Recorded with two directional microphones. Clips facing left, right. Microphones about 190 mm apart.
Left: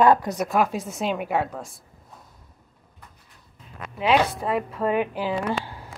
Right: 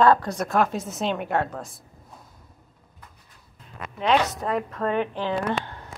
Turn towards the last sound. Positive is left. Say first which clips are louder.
# even
turn(degrees=5)  # may be behind; listen again after turning